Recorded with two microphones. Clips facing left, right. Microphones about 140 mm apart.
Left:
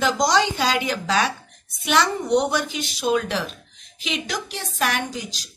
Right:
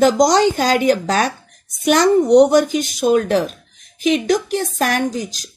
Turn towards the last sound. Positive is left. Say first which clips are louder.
# right 9 dB
turn(degrees=-45)  # may be behind; listen again after turning